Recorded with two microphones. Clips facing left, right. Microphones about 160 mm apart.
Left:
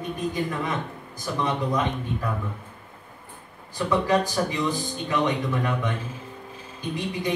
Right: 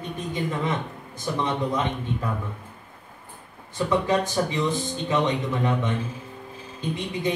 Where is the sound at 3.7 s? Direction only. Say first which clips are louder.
Even; 20° right (ahead or behind).